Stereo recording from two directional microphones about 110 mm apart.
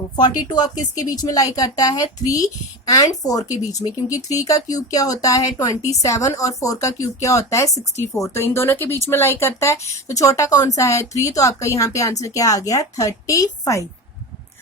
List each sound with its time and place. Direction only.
0.2 s a woman's voice: 40° left (ahead or behind)